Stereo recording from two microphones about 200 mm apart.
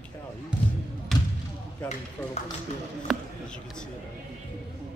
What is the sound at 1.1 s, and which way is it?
Basketball bounce, centre (ahead or behind).